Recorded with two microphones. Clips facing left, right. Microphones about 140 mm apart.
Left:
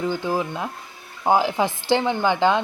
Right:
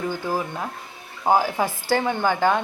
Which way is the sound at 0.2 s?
15° left (ahead or behind).